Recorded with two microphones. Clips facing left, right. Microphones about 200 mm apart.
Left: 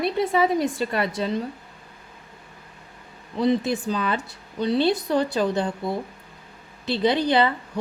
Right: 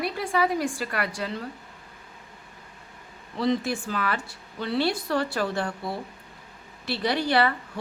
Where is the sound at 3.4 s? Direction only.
20° left (ahead or behind).